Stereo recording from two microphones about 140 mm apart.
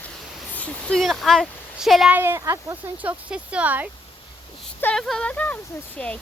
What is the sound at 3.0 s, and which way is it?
Speech, 10° right (ahead or behind).